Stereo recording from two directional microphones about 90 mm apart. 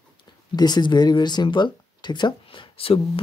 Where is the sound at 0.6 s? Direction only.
50° left (ahead or behind).